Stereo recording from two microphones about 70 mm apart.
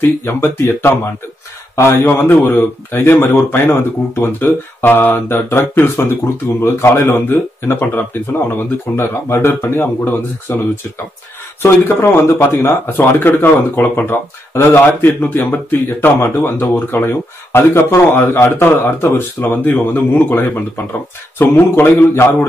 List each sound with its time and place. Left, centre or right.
0.0 s speech: left
11.6 s speech: left